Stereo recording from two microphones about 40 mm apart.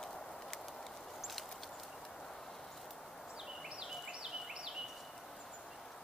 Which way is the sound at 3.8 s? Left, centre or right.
Centre.